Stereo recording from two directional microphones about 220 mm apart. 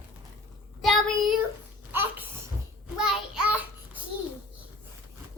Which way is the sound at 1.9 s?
10° right (ahead or behind).